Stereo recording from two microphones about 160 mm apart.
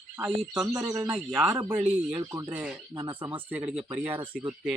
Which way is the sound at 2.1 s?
25° right (ahead or behind).